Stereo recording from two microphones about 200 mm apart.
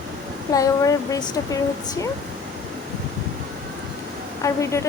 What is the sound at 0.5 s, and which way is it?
Speech, 15° left (ahead or behind).